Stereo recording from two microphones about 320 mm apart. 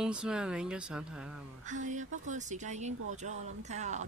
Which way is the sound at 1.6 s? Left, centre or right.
Right.